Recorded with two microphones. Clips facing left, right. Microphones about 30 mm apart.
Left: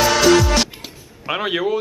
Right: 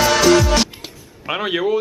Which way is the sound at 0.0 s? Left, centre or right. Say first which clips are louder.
Even; centre.